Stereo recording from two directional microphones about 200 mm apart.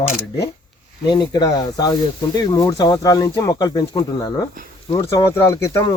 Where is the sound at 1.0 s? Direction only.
20° left (ahead or behind).